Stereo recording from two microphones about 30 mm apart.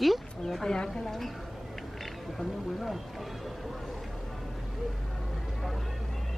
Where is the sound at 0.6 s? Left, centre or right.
Centre.